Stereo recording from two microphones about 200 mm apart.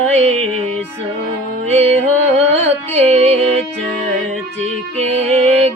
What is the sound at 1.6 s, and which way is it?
Music, 35° right (ahead or behind).